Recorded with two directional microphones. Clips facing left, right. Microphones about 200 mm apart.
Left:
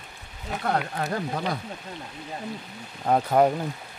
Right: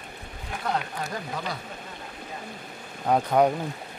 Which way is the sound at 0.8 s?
60° left (ahead or behind).